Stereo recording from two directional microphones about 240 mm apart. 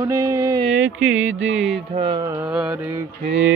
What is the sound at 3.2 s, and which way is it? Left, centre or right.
Mantra, right.